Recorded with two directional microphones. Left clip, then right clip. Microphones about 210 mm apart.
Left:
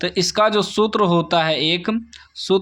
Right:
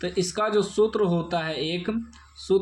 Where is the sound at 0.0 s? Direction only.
35° left (ahead or behind).